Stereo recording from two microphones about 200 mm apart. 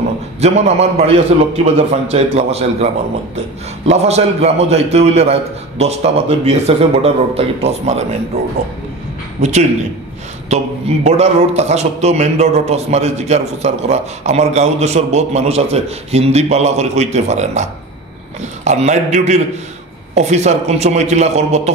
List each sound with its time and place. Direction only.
0.4 s speech: 35° right (ahead or behind)
3.9 s speech: 30° right (ahead or behind)
9.4 s speech: 35° right (ahead or behind)